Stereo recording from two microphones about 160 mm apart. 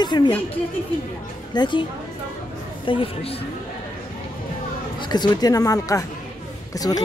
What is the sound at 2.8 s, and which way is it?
Speech, 30° left (ahead or behind).